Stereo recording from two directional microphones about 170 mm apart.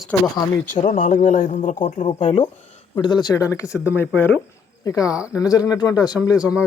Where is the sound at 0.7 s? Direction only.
50° left (ahead or behind).